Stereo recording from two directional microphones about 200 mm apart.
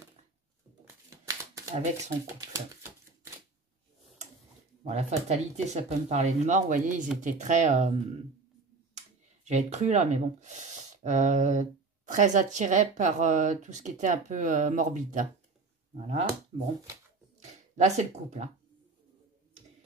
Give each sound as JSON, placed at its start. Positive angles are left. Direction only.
{"t": 1.1, "sound": "shuffling cards", "side_deg": -15}
{"t": 4.8, "sound": "speech", "side_deg": -35}
{"t": 8.9, "sound": "speech", "side_deg": -35}
{"t": 17.4, "sound": "speech", "side_deg": -35}